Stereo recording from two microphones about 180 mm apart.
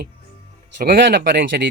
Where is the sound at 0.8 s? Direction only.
60° right (ahead or behind).